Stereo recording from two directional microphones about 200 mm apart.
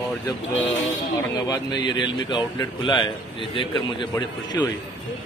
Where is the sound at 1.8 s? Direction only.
25° left (ahead or behind).